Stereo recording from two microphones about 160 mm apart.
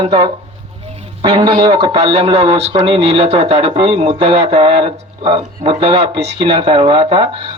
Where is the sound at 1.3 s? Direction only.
35° right (ahead or behind).